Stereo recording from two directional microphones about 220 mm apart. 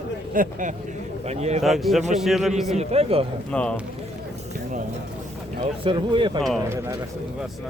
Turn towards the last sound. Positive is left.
turn(degrees=-10)  # may be behind; listen again after turning